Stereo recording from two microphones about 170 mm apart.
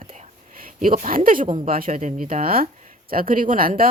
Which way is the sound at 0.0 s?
35° right (ahead or behind).